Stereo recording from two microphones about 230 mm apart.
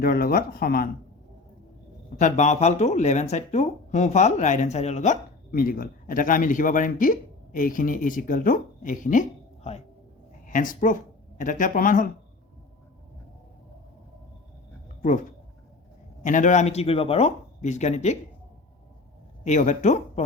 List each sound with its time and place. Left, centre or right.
0.0 s speech: left
2.1 s speech: left
10.4 s speech: left
16.2 s speech: left
19.5 s speech: left